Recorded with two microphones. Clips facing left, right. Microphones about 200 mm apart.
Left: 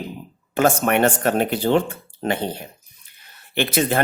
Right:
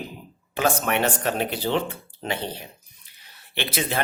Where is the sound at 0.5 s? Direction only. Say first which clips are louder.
Left 5 dB; 50° left (ahead or behind).